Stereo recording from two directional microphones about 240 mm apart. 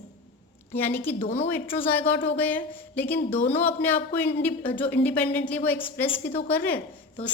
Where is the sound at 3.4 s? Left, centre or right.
Left.